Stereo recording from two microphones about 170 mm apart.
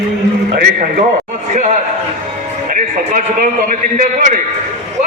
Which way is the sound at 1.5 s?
45° right (ahead or behind).